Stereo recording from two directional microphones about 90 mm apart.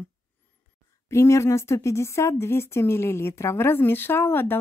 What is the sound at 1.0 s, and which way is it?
Speech, 30° left (ahead or behind).